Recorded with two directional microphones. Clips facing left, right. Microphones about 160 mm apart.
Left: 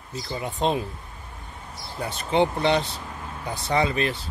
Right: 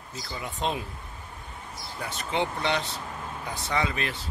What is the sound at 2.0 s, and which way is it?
Speech, 30° left (ahead or behind).